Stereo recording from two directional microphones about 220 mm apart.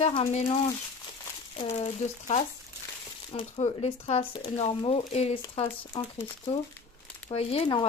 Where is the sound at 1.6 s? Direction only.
30° left (ahead or behind).